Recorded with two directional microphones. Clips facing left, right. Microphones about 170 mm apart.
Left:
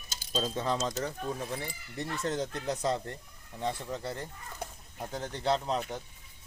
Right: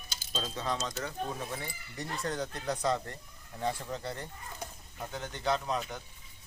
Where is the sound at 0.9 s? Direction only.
40° left (ahead or behind).